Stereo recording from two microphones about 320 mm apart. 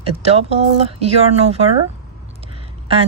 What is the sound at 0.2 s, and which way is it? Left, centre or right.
Speech, centre.